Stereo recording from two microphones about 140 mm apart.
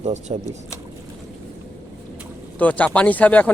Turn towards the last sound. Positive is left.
turn(degrees=10)  # may be behind; listen again after turning